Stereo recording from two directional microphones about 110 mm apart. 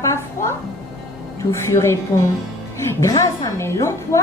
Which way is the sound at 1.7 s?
25° left (ahead or behind).